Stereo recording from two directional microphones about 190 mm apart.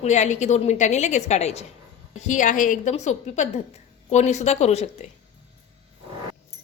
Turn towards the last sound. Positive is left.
turn(degrees=35)  # may be behind; listen again after turning